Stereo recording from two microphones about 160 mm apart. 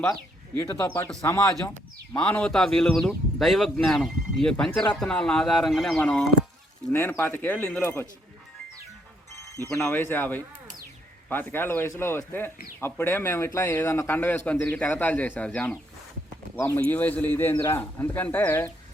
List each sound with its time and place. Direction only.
0.5 s speech: 15° left (ahead or behind)
2.1 s speech: 5° left (ahead or behind)
6.0 s speech: 10° left (ahead or behind)
9.8 s speech: 15° left (ahead or behind)